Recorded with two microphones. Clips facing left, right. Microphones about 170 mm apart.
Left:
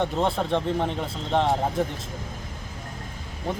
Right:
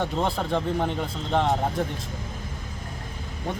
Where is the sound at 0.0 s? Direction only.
Centre (ahead or behind).